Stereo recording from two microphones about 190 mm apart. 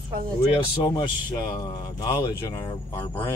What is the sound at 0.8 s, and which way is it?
Speech, 20° left (ahead or behind).